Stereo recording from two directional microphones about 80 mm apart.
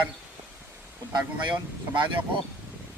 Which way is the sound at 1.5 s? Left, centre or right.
Right.